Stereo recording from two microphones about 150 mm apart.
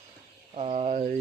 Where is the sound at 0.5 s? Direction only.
40° right (ahead or behind).